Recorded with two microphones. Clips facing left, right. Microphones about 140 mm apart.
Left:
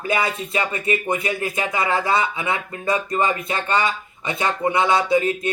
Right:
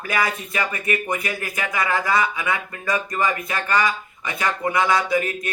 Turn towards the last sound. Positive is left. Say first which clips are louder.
# left 4 dB
turn(degrees=25)  # may be behind; listen again after turning